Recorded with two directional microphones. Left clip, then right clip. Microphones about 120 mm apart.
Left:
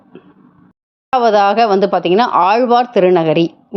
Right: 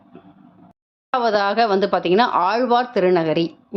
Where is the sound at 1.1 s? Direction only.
35° left (ahead or behind).